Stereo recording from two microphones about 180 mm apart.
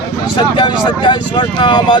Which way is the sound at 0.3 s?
25° left (ahead or behind).